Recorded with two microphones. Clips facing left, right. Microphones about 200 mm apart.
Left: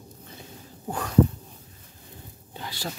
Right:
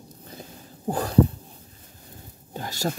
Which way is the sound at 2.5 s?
45° right (ahead or behind).